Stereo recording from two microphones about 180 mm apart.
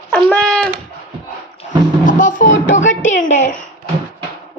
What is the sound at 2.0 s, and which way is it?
A woman's voice, 45° left (ahead or behind).